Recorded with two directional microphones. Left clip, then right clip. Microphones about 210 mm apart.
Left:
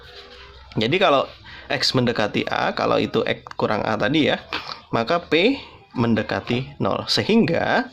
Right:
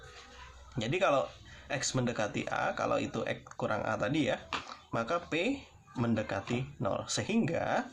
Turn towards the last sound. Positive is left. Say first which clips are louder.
# left 12 dB
turn(degrees=45)  # may be behind; listen again after turning